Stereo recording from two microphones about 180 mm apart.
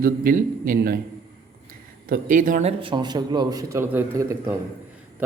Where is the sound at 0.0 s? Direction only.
50° right (ahead or behind).